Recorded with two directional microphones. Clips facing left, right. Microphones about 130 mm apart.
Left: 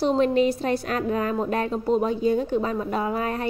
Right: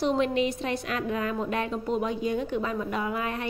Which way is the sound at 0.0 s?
40° left (ahead or behind).